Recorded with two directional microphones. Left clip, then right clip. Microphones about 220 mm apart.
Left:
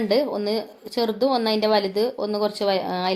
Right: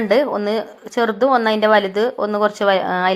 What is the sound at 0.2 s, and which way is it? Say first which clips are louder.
A woman's voice: right 5 dB; 10° right (ahead or behind).